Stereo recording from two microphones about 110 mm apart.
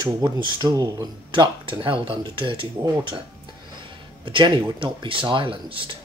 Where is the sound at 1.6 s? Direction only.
50° right (ahead or behind).